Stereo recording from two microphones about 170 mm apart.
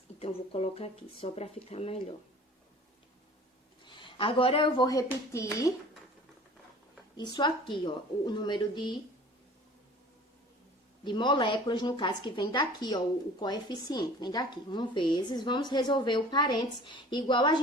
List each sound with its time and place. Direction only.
0.2 s speech: 35° left (ahead or behind)
3.8 s speech: 30° left (ahead or behind)
7.2 s a woman's voice: 25° left (ahead or behind)
11.0 s a woman's voice: 25° left (ahead or behind)